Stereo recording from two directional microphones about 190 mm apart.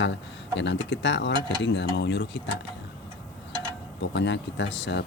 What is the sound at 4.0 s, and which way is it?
Speech, 65° left (ahead or behind).